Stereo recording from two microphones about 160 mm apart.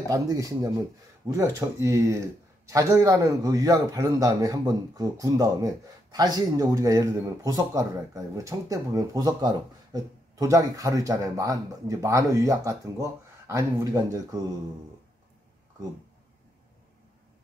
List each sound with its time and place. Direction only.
0.1 s speech: 20° right (ahead or behind)